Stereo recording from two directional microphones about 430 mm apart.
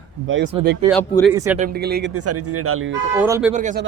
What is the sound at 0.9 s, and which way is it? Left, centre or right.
Speech, centre.